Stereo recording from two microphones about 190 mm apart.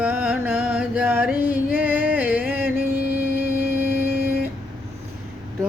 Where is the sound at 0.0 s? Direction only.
5° right (ahead or behind).